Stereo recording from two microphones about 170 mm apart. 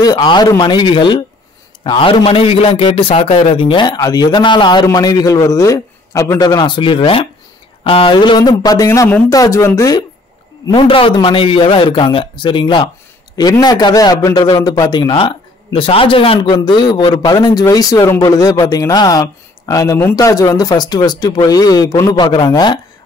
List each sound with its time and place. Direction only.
0.0 s a man's voice: 25° left (ahead or behind)